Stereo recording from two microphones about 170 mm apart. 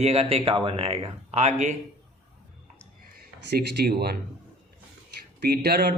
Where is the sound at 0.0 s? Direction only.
35° right (ahead or behind).